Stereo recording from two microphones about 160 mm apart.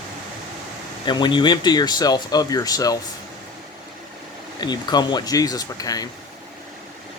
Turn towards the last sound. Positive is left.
turn(degrees=25)  # may be behind; listen again after turning